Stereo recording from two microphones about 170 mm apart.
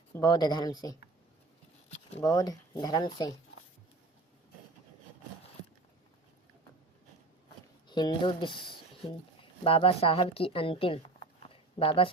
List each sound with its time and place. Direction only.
0.2 s speech: 25° left (ahead or behind)
2.2 s speech: 20° left (ahead or behind)
7.9 s a woman's voice: 25° left (ahead or behind)